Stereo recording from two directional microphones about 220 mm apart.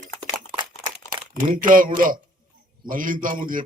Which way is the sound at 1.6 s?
40° right (ahead or behind).